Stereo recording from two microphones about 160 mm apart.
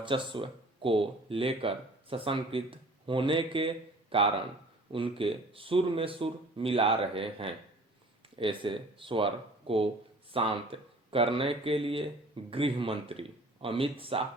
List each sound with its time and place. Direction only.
0.0 s speech: 30° right (ahead or behind)